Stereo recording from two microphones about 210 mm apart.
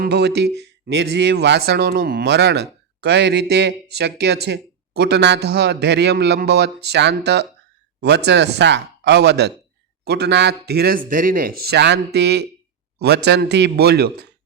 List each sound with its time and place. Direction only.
0.0 s speech: 50° right (ahead or behind)